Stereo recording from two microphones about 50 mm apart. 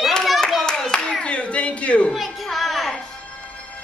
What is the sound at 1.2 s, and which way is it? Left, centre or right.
Speech, left.